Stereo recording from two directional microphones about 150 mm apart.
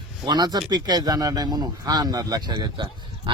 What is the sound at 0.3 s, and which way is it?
Speech, 30° right (ahead or behind).